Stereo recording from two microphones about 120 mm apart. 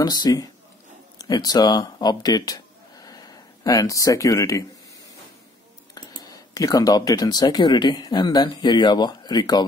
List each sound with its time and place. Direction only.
0.0 s speech: 30° left (ahead or behind)
5.9 s speech: 35° left (ahead or behind)